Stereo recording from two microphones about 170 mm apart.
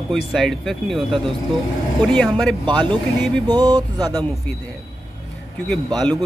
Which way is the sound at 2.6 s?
25° right (ahead or behind).